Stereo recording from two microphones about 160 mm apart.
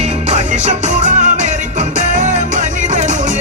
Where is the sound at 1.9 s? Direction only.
50° right (ahead or behind).